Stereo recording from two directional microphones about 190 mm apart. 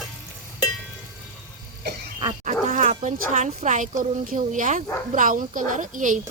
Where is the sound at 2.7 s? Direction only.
40° right (ahead or behind).